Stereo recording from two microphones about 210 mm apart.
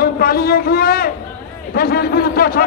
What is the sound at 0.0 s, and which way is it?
A man's voice, 45° left (ahead or behind).